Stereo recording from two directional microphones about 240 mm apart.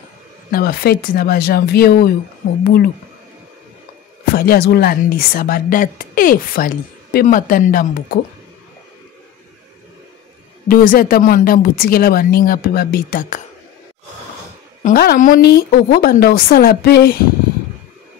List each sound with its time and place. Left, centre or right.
0.5 s a woman's voice: left
4.4 s a woman's voice: left
10.7 s a woman's voice: left
14.8 s a woman's voice: left